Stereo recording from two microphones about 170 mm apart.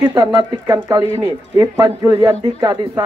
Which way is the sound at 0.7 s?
15° right (ahead or behind).